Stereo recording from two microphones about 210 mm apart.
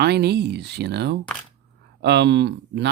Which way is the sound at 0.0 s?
50° right (ahead or behind).